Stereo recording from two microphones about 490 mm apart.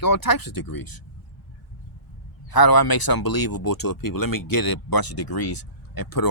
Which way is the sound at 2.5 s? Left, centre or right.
Left.